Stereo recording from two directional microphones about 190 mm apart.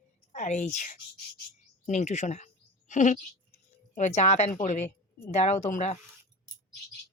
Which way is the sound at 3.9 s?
35° left (ahead or behind).